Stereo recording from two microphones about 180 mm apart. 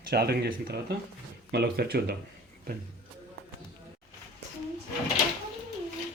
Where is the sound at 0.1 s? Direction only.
60° right (ahead or behind).